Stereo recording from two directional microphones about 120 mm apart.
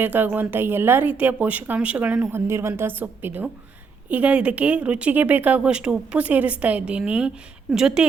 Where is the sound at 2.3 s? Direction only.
20° right (ahead or behind).